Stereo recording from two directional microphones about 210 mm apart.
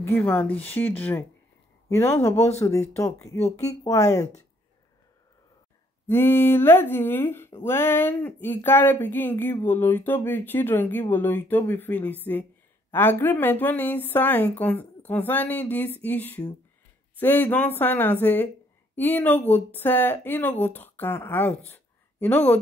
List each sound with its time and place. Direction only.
0.0 s speech: 10° left (ahead or behind)
6.0 s speech: 10° left (ahead or behind)